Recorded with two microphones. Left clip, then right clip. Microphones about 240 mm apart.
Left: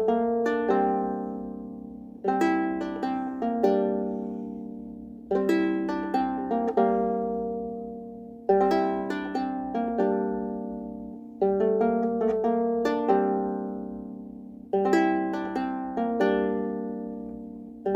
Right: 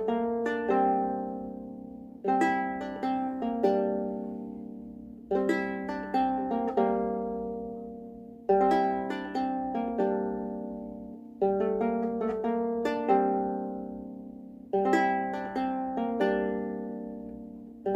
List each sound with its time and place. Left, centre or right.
0.0 s harp: left
2.2 s music: left
8.5 s music: left
11.3 s harp: left
14.7 s music: left